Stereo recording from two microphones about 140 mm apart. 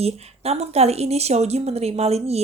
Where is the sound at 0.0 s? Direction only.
50° right (ahead or behind).